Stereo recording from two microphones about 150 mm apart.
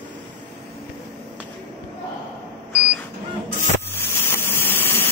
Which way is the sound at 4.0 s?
15° left (ahead or behind).